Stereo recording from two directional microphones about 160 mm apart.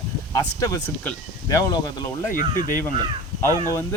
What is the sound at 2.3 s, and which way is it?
Speech, 60° left (ahead or behind).